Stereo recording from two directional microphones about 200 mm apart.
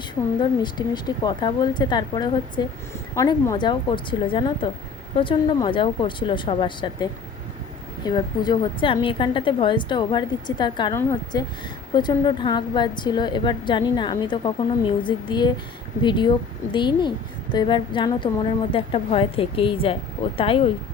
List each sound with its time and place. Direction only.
0.6 s a woman's voice: 20° left (ahead or behind)